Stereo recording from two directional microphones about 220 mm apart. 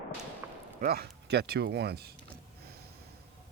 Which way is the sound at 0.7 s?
45° right (ahead or behind).